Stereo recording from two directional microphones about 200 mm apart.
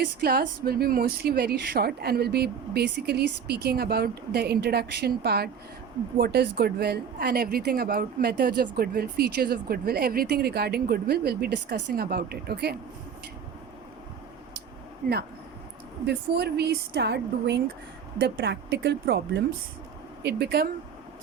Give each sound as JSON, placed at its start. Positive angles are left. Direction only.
{"t": 0.0, "sound": "a woman's voice", "side_deg": -50}
{"t": 16.0, "sound": "a woman's voice", "side_deg": -55}